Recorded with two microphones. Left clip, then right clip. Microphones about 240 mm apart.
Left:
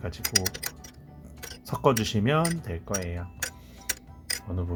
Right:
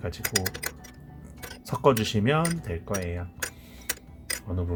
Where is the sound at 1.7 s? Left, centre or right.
Centre.